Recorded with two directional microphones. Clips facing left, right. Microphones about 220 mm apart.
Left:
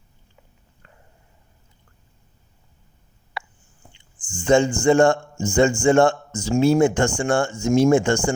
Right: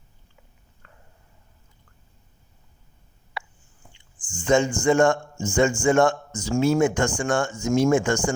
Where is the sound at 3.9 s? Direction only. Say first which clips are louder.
Left 3 dB; 25° left (ahead or behind).